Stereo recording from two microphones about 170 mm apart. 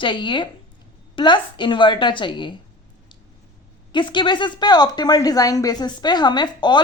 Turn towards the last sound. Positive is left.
turn(degrees=25)  # may be behind; listen again after turning